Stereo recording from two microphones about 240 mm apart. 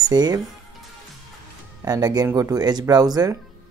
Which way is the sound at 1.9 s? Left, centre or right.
Centre.